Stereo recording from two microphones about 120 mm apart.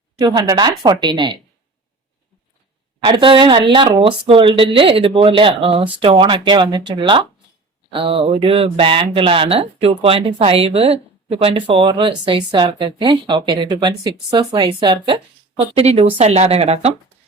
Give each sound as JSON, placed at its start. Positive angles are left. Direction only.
{"t": 0.2, "sound": "a woman's voice", "side_deg": -30}
{"t": 3.0, "sound": "speech", "side_deg": -45}